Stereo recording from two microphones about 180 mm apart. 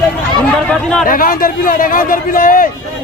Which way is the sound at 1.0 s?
50° left (ahead or behind).